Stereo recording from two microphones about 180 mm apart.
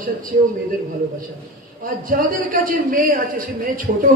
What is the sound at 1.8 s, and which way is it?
A man's voice, 50° right (ahead or behind).